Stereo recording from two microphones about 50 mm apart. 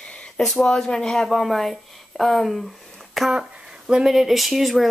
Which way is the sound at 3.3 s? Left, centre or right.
Centre.